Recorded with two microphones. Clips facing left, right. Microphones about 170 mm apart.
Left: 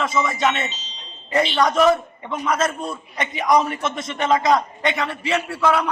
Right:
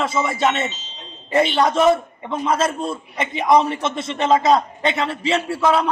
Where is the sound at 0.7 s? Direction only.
55° right (ahead or behind).